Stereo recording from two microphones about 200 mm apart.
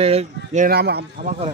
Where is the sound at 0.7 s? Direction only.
55° right (ahead or behind).